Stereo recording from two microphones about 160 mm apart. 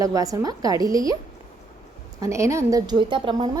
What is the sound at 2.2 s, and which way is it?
A woman's voice, 20° right (ahead or behind).